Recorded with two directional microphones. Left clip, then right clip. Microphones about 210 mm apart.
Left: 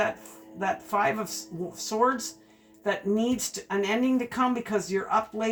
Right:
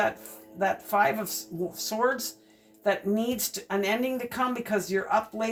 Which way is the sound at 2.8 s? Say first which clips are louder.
Even; 40° right (ahead or behind).